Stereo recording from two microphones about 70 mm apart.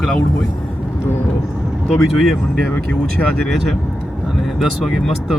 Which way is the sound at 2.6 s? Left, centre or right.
Left.